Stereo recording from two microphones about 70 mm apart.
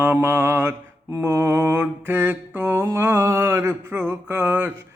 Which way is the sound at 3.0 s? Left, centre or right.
Right.